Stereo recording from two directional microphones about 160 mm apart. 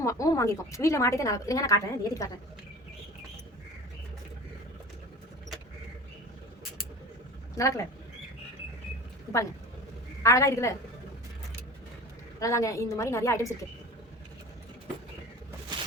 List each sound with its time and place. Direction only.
0.0 s a woman's voice: 20° left (ahead or behind)
7.5 s speech: 20° left (ahead or behind)
10.2 s a woman's voice: 20° left (ahead or behind)
12.4 s a woman's voice: 20° left (ahead or behind)